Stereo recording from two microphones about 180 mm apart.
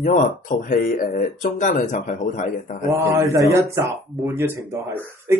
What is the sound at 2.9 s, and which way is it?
Speech, 15° right (ahead or behind).